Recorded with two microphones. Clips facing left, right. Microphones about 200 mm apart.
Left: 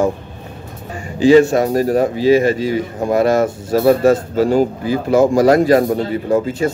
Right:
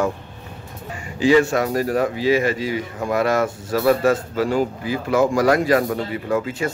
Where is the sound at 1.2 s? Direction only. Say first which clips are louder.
Left 6 dB; 30° left (ahead or behind).